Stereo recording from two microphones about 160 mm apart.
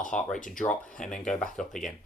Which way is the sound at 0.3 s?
55° left (ahead or behind).